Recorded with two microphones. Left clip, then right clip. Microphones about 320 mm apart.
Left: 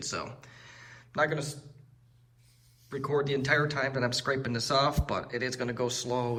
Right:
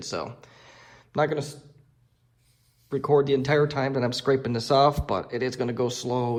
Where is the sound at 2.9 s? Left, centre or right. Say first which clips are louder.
Right 8 dB; centre.